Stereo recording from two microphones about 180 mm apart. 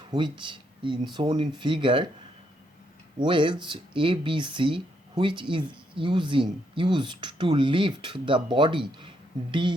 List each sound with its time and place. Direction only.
0.1 s speech: 25° right (ahead or behind)
3.2 s speech: 25° right (ahead or behind)